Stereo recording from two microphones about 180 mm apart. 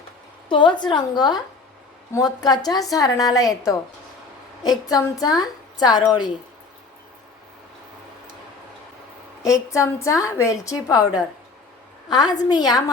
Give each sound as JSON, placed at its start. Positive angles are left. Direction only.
{"t": 0.4, "sound": "a woman's voice", "side_deg": 25}
{"t": 4.9, "sound": "a woman's voice", "side_deg": 20}
{"t": 9.4, "sound": "a woman's voice", "side_deg": 15}